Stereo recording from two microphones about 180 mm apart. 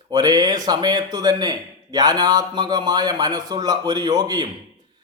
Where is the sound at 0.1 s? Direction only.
20° right (ahead or behind).